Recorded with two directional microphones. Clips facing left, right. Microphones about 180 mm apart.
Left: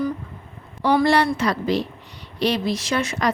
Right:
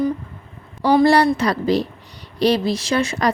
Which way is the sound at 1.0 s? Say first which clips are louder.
Right 4 dB; 35° right (ahead or behind).